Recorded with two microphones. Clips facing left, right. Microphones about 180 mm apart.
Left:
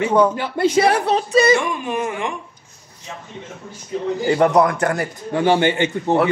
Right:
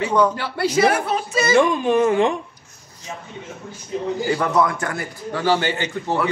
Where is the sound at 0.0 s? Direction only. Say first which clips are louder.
Left 2 dB; 20° left (ahead or behind).